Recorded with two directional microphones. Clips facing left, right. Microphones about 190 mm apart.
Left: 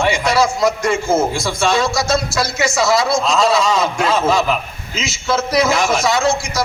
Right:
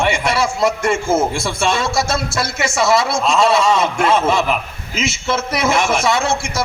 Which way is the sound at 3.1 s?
25° right (ahead or behind).